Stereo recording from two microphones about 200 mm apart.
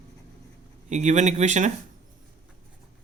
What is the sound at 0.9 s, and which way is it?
Speech, 35° right (ahead or behind).